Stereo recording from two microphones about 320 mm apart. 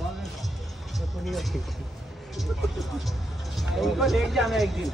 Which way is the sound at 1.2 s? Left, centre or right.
Centre.